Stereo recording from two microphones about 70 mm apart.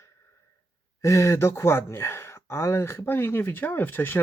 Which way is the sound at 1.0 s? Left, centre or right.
Left.